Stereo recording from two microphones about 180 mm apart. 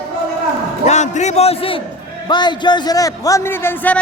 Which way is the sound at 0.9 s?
40° left (ahead or behind).